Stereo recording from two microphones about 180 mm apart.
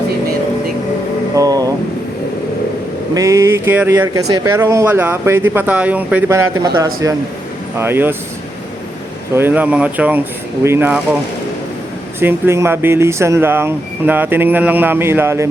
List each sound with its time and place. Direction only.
1.4 s a sound: 20° right (ahead or behind)
3.2 s speech: 15° right (ahead or behind)
9.3 s speech: 10° right (ahead or behind)
12.2 s speech: 15° right (ahead or behind)